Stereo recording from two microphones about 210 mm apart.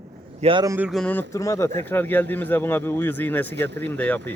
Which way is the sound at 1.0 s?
10° left (ahead or behind).